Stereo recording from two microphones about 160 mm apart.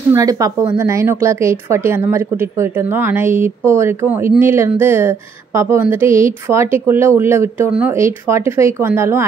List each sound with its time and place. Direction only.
0.1 s speech: 20° right (ahead or behind)